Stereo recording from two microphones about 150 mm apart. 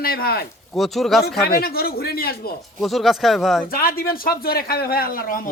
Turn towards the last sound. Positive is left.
turn(degrees=70)  # may be behind; listen again after turning